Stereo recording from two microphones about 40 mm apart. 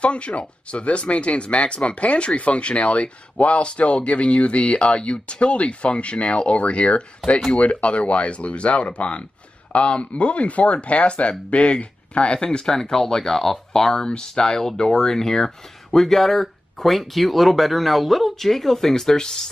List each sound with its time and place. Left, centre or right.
0.0 s speech: left
12.4 s speech: centre